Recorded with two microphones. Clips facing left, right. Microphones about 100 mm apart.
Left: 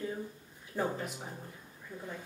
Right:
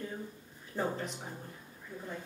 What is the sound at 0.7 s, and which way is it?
Speech, 20° right (ahead or behind).